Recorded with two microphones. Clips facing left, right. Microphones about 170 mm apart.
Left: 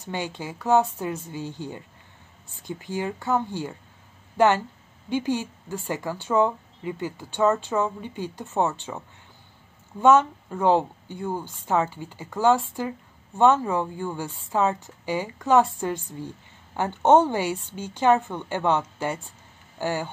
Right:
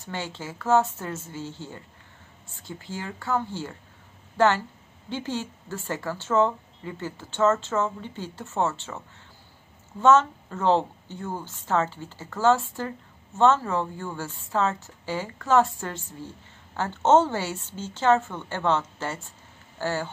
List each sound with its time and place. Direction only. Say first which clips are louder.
0.0 s speech: left 3 dB; 15° left (ahead or behind)
5.1 s speech: left 5 dB; 15° left (ahead or behind)